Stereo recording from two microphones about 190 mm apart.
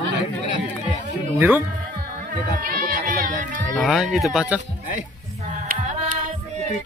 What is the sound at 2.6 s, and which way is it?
Speech, 50° right (ahead or behind).